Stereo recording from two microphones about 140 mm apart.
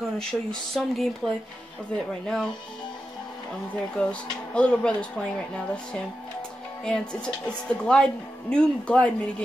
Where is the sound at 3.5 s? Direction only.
10° left (ahead or behind).